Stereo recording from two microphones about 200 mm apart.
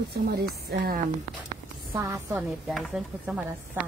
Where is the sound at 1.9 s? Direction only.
15° right (ahead or behind).